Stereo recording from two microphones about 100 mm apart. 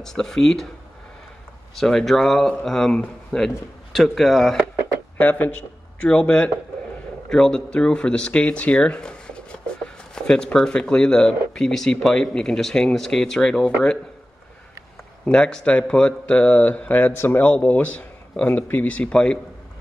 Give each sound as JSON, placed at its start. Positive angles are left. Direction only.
{"t": 0.0, "sound": "speech", "side_deg": 5}
{"t": 1.8, "sound": "speech", "side_deg": 5}
{"t": 5.1, "sound": "speech", "side_deg": 15}
{"t": 15.2, "sound": "speech", "side_deg": 10}